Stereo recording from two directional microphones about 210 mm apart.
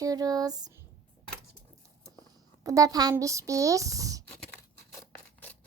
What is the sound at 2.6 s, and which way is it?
Speech, 15° right (ahead or behind).